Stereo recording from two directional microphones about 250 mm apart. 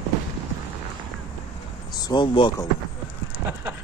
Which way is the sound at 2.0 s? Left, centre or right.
Centre.